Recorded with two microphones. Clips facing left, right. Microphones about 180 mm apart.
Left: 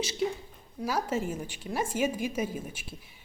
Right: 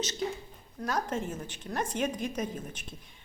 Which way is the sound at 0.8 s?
10° left (ahead or behind).